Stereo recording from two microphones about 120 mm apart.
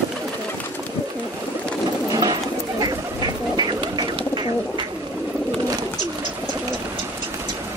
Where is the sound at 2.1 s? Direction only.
35° right (ahead or behind).